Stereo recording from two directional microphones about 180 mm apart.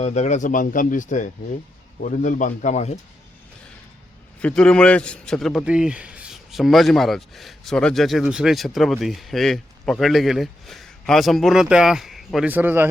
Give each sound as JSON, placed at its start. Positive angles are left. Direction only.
{"t": 0.0, "sound": "speech", "side_deg": 40}
{"t": 4.4, "sound": "a man's voice", "side_deg": 5}